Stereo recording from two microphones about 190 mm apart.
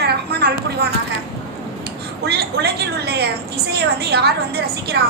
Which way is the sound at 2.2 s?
60° right (ahead or behind).